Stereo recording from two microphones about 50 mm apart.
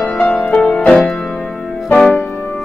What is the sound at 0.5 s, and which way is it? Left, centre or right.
Music, left.